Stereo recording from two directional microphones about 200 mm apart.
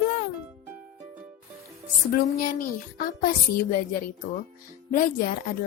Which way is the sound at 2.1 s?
45° left (ahead or behind).